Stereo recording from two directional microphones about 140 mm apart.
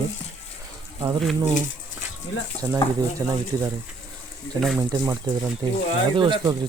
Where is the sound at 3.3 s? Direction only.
25° right (ahead or behind).